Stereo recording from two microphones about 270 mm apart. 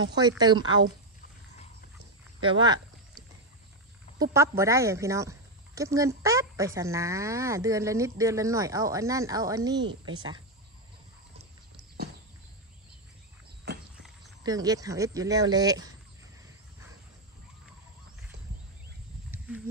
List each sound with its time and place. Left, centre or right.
0.0 s a woman's voice: centre
2.4 s a sound: centre
4.2 s a woman's voice: centre
13.7 s walk: right
14.4 s a woman's voice: centre